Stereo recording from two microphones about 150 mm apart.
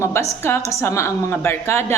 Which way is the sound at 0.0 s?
20° left (ahead or behind).